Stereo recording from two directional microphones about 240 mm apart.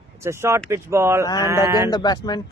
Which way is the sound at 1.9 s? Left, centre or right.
Centre.